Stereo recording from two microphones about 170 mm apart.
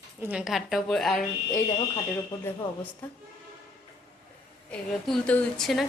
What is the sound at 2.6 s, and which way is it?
Speech, 30° left (ahead or behind).